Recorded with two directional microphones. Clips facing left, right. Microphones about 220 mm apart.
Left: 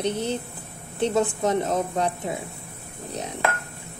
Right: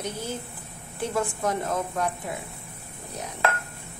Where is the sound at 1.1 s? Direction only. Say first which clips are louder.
Left 4 dB; 20° left (ahead or behind).